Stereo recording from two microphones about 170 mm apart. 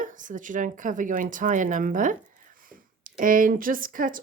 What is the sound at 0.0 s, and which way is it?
Speech, 50° right (ahead or behind).